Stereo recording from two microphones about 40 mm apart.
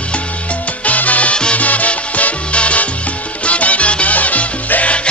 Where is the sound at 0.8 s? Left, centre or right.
Left.